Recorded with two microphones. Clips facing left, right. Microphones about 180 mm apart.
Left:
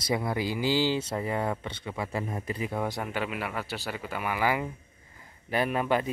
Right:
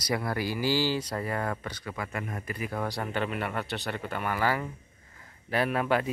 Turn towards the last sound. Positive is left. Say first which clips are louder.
# even
turn(degrees=0)  # may be behind; listen again after turning